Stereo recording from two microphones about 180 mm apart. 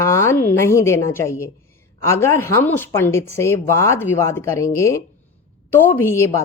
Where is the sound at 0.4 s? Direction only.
15° left (ahead or behind).